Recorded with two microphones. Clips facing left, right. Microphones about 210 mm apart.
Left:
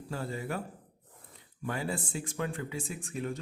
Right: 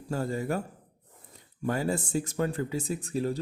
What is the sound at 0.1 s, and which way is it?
Speech, 45° right (ahead or behind).